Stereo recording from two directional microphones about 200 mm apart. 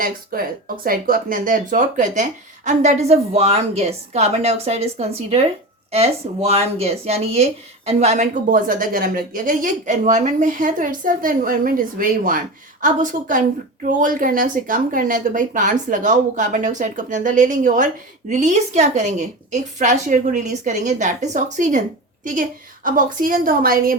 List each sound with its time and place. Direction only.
0.0 s a woman's voice: 45° right (ahead or behind)